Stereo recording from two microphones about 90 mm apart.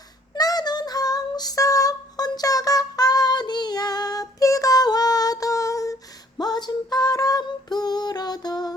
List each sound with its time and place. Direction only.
0.3 s child singing: 45° left (ahead or behind)
6.4 s female singing: 50° left (ahead or behind)